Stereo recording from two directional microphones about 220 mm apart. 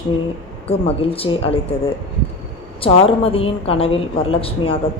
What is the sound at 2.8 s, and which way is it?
A man's voice, 25° left (ahead or behind).